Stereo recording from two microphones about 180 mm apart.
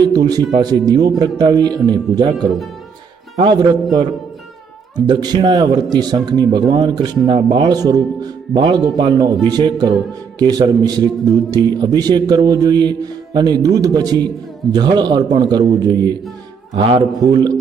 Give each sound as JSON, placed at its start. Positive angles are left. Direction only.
{"t": 0.0, "sound": "a man's voice", "side_deg": -20}
{"t": 5.0, "sound": "a man's voice", "side_deg": -25}